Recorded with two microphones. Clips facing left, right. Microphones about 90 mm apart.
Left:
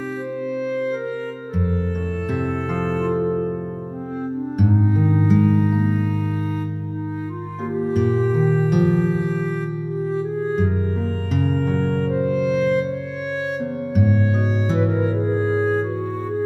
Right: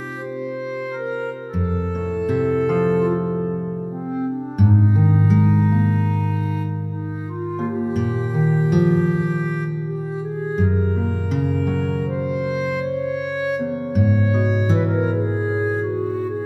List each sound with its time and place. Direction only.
0.7 s music: 10° right (ahead or behind)
2.2 s music: centre (ahead or behind)
4.6 s music: centre (ahead or behind)
4.8 s music: 15° right (ahead or behind); by 5.9 s centre (ahead or behind)
7.6 s music: 20° right (ahead or behind)
7.9 s music: 5° right (ahead or behind)
11.9 s music: 10° right (ahead or behind)
14.7 s music: centre (ahead or behind)
15.0 s music: 15° right (ahead or behind)